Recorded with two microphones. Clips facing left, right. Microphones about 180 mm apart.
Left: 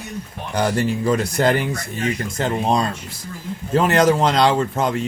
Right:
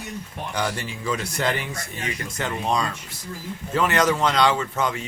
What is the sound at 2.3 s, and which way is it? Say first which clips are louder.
Speech: left 4 dB; 30° left (ahead or behind).